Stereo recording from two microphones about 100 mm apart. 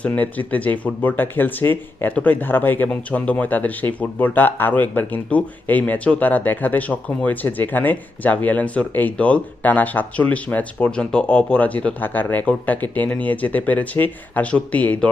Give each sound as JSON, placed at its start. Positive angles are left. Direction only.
{"t": 0.1, "sound": "speech", "side_deg": 15}